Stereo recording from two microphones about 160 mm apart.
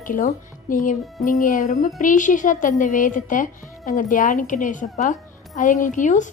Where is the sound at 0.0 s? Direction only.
55° left (ahead or behind).